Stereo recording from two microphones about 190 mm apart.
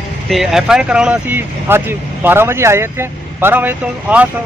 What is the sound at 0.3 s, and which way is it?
Speech, centre (ahead or behind).